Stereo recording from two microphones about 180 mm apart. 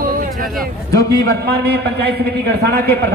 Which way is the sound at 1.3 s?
60° right (ahead or behind).